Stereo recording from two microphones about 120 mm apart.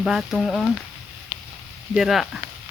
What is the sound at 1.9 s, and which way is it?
Speech, centre (ahead or behind).